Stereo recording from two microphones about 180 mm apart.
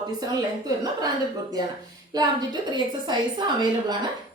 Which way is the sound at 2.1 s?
20° right (ahead or behind).